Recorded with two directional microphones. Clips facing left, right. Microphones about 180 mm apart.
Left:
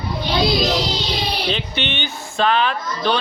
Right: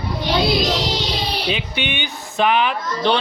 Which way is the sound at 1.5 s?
10° right (ahead or behind).